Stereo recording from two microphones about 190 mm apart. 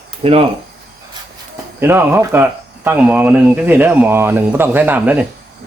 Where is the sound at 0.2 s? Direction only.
30° right (ahead or behind).